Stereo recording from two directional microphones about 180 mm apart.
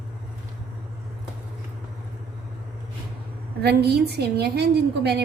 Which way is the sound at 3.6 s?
65° right (ahead or behind).